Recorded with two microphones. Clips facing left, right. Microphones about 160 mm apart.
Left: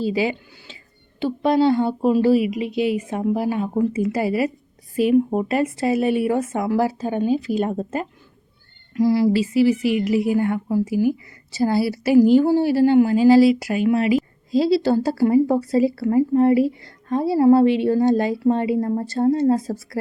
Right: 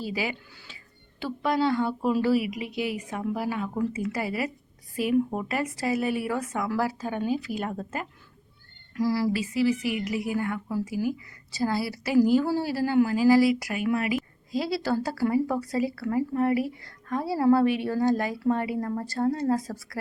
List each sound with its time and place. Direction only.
0.0 s a woman's voice: 25° left (ahead or behind)